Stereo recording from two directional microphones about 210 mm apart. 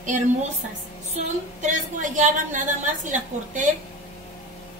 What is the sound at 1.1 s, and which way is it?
A woman's voice, 35° right (ahead or behind).